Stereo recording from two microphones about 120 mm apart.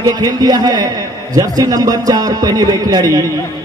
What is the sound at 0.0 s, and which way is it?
A man's voice, 30° right (ahead or behind).